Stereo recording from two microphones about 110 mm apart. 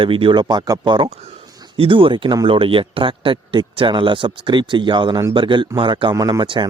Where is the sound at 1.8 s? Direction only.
50° right (ahead or behind).